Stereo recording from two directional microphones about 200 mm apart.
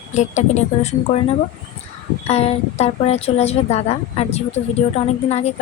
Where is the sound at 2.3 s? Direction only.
30° left (ahead or behind).